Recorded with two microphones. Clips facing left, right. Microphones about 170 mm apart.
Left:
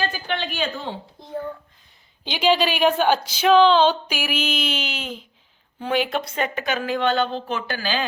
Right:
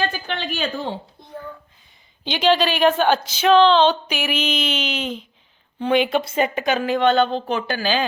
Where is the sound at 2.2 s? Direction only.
5° left (ahead or behind).